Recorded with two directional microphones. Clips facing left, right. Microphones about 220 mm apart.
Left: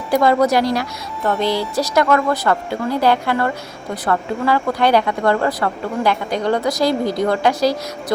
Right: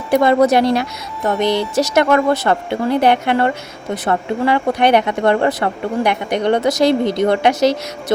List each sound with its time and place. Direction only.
0.1 s speech: 25° right (ahead or behind)